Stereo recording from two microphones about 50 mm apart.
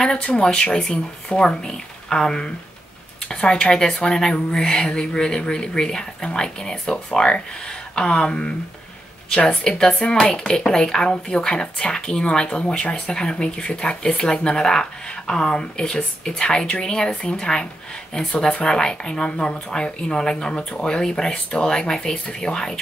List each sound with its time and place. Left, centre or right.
0.0 s a woman's voice: centre